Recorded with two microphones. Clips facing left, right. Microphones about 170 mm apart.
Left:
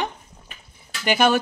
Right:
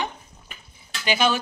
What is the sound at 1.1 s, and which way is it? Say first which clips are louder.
Speech: left 3 dB; 55° left (ahead or behind).